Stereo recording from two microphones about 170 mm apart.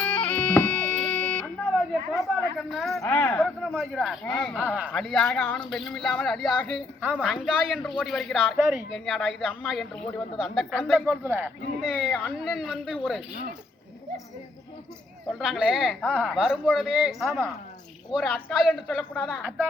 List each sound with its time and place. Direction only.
0.0 s music: 5° left (ahead or behind)
2.2 s speech: centre (ahead or behind)
3.0 s speech: 10° left (ahead or behind)
11.3 s speech: 15° right (ahead or behind)
11.9 s speech: 5° left (ahead or behind)
15.3 s speech: centre (ahead or behind)
17.2 s speech: 15° right (ahead or behind)
18.7 s speech: centre (ahead or behind)